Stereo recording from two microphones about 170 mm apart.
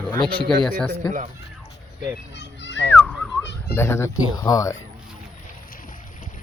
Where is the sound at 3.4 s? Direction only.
90° left.